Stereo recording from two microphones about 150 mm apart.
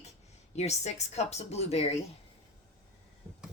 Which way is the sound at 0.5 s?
45° left (ahead or behind).